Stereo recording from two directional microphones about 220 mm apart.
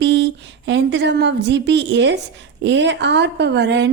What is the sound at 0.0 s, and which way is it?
A woman's voice, 55° right (ahead or behind).